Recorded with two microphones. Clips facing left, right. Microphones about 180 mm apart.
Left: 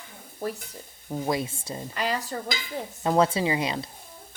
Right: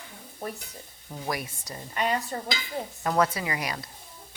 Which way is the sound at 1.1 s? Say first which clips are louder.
Left 6 dB; 25° left (ahead or behind).